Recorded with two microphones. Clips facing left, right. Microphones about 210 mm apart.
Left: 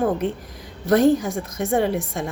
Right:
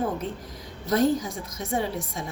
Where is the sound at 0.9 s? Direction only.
75° left (ahead or behind).